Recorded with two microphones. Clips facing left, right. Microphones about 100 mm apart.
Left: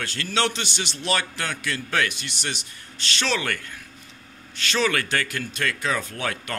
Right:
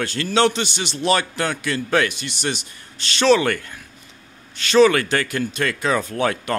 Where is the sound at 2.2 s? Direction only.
10° right (ahead or behind).